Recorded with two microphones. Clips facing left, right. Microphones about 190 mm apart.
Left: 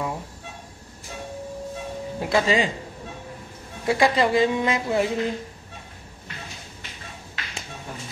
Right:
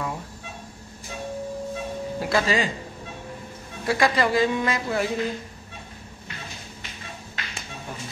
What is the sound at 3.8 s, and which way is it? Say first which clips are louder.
A man's voice: left 2 dB; 20° left (ahead or behind).